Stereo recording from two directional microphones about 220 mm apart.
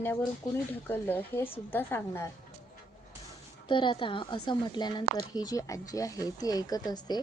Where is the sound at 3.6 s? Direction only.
20° left (ahead or behind).